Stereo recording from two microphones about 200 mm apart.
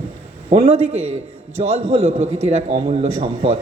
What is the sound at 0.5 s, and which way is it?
A man's voice, 30° right (ahead or behind).